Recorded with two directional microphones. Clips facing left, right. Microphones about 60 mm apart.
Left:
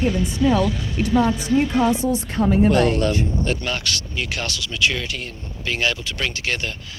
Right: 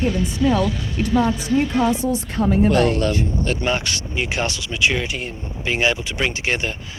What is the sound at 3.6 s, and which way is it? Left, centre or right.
Speech, right.